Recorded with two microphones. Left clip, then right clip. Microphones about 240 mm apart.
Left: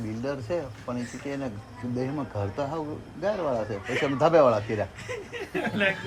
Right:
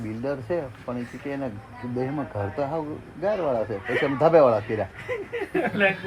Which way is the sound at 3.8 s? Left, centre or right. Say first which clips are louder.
Right 3 dB; centre.